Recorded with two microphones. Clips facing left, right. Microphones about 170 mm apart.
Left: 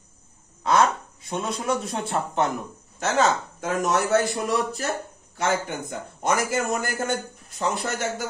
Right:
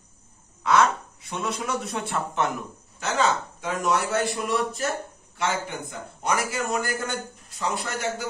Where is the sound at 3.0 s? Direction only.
45° left (ahead or behind).